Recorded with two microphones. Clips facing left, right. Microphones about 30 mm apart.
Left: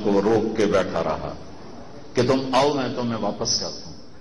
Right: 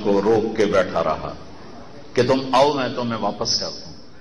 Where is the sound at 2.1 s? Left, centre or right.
Centre.